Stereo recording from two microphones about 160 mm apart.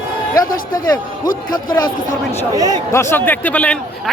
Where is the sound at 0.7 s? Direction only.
25° left (ahead or behind).